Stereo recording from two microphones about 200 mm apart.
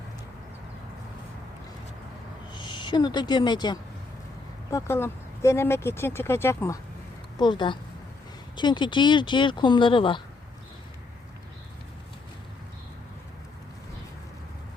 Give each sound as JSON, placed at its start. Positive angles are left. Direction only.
{"t": 2.5, "sound": "speech", "side_deg": 20}